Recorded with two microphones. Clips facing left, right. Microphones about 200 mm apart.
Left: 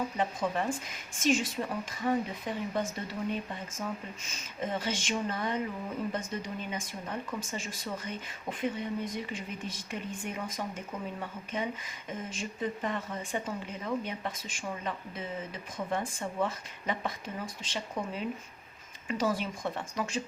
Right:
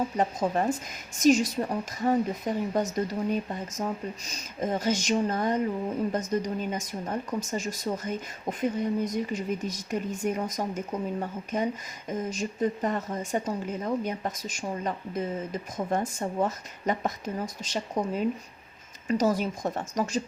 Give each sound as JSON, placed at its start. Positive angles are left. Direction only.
{"t": 0.2, "sound": "speech", "side_deg": -40}